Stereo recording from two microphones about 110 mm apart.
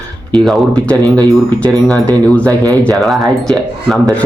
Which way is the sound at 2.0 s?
15° left (ahead or behind).